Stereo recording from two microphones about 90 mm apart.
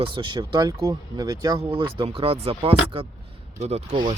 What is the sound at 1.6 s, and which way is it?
Speech, 65° right (ahead or behind).